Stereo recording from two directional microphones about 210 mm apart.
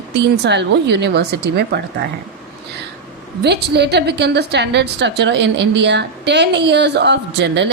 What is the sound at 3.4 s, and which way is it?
A woman's voice, 55° right (ahead or behind).